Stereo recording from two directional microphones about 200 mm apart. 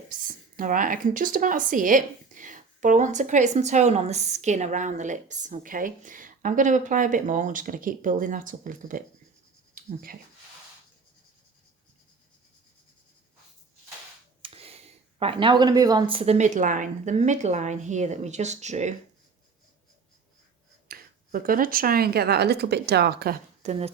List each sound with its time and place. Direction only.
0.1 s speech: 45° right (ahead or behind)
14.4 s speech: 30° right (ahead or behind)
20.8 s speech: 45° right (ahead or behind)
23.6 s speech: 35° right (ahead or behind)